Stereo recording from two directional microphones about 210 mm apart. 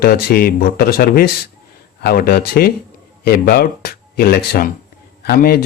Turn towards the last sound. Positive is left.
turn(degrees=45)  # may be behind; listen again after turning